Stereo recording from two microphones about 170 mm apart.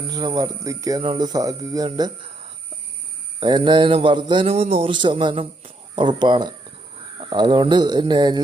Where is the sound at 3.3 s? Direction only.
25° right (ahead or behind).